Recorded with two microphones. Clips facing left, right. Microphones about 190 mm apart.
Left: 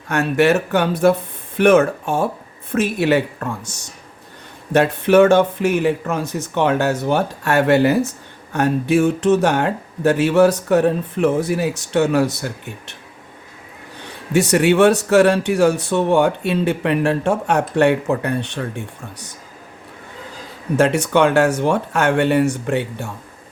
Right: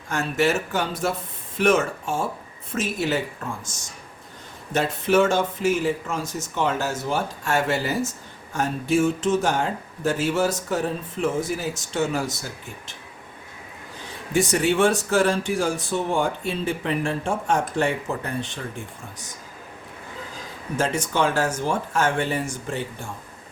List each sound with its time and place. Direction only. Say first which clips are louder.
0.1 s speech: left 7 dB; 65° left (ahead or behind)
14.0 s speech: left 5 dB; 65° left (ahead or behind)
20.7 s speech: left 8 dB; 65° left (ahead or behind)